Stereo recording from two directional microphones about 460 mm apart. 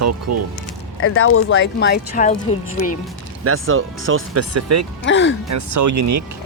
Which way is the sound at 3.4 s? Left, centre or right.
Right.